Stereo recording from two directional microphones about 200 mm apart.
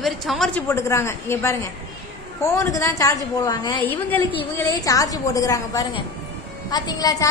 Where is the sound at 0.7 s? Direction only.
15° left (ahead or behind).